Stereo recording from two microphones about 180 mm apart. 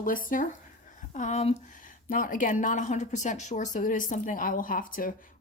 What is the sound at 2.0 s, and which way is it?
A woman's voice, 50° left (ahead or behind).